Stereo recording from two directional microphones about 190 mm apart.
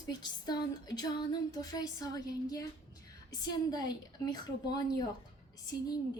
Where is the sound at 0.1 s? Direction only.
20° left (ahead or behind).